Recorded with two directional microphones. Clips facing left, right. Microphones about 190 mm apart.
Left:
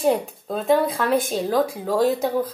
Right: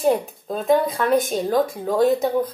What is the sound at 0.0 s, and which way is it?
Speech, centre (ahead or behind).